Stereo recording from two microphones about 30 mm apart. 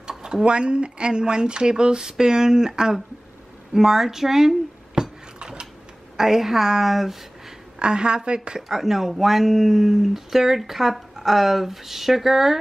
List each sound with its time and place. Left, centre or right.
0.5 s speech: right
3.7 s speech: centre
5.4 s a sound: right
6.1 s speech: centre
7.8 s a woman's voice: right
8.6 s speech: centre